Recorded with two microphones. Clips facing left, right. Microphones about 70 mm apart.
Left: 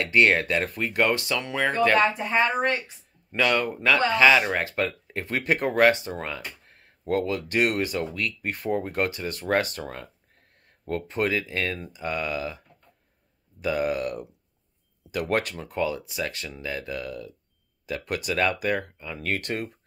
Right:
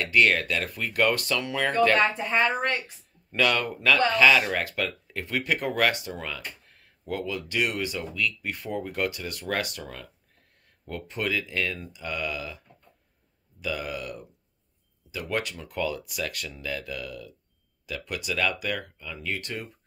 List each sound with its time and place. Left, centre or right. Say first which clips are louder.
0.1 s speech: left 2 dB; left
13.6 s speech: left 7 dB; left
15.0 s speech: left 5 dB; left
15.7 s speech: left 3 dB; left
19.1 s speech: left 5 dB; left